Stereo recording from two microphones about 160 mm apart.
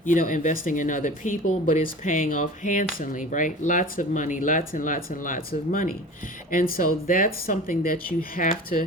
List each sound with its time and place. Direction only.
0.0 s speech: 55° left (ahead or behind)